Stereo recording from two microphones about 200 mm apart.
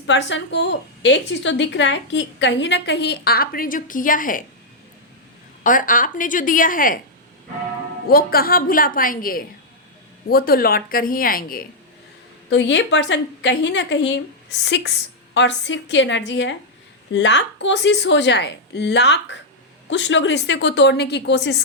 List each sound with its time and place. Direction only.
0.0 s a woman's voice: 65° left (ahead or behind); by 4.4 s 45° left (ahead or behind)
5.6 s a woman's voice: 40° left (ahead or behind)
8.0 s a woman's voice: 50° left (ahead or behind)
12.5 s a woman's voice: 65° left (ahead or behind)